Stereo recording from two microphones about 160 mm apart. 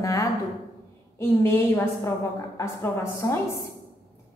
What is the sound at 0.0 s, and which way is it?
A woman's voice, 20° left (ahead or behind).